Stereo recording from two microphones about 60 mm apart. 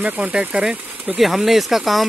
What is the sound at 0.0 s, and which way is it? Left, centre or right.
Speech, centre.